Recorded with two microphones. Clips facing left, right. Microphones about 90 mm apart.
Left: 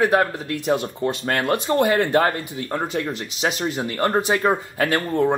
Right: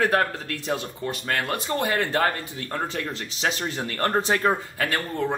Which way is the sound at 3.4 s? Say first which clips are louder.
Left 4 dB; 15° left (ahead or behind).